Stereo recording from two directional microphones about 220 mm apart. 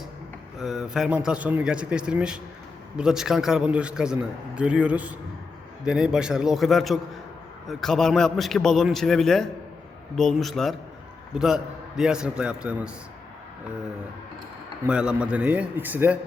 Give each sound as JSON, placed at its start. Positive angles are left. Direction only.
{"t": 0.6, "sound": "speech", "side_deg": 0}
{"t": 14.8, "sound": "speech", "side_deg": -5}